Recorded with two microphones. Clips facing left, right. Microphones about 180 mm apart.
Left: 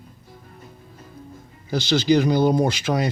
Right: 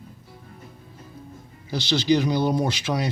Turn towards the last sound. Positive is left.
turn(degrees=50)  # may be behind; listen again after turning